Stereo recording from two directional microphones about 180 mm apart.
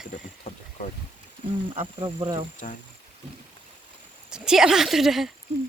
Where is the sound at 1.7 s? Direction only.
30° right (ahead or behind).